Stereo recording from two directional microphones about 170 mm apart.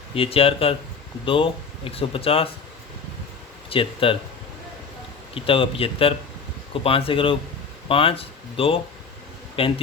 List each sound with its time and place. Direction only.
0.1 s speech: 35° left (ahead or behind)
3.7 s speech: 30° left (ahead or behind)
5.3 s speech: 30° left (ahead or behind)